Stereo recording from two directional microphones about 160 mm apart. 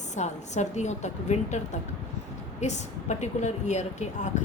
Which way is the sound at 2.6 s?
45° left (ahead or behind).